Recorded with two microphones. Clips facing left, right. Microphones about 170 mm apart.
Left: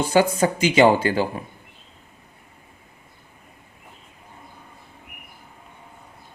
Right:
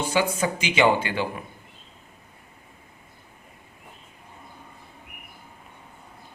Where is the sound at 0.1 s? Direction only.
45° left (ahead or behind).